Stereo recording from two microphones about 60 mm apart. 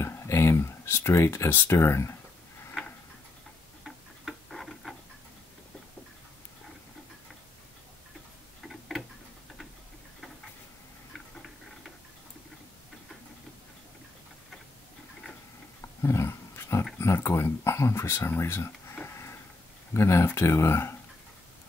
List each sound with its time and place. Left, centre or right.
0.0 s a sound: left
1.7 s speech: left
3.8 s tick-tock: centre
8.6 s tick-tock: centre
16.0 s dog: left
17.0 s a sound: left
19.9 s speech: left